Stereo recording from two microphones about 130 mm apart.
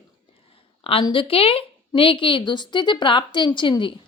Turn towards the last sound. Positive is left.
turn(degrees=40)  # may be behind; listen again after turning